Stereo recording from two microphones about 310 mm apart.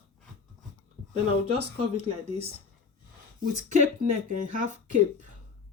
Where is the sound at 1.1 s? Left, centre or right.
Centre.